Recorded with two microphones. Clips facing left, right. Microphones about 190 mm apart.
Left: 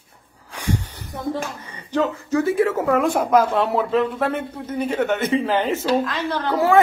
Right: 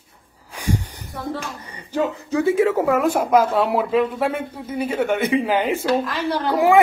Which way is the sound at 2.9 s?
5° right (ahead or behind).